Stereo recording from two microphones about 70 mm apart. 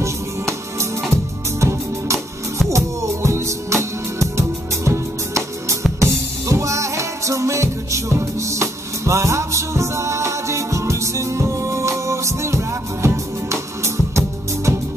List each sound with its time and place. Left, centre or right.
0.0 s music: right